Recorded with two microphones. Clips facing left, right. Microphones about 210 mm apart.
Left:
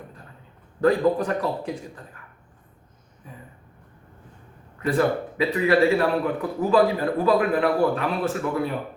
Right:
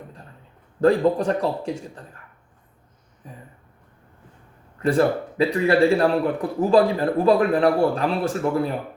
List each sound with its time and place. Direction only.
0.8 s a man's voice: 30° right (ahead or behind)
4.9 s a man's voice: 30° right (ahead or behind)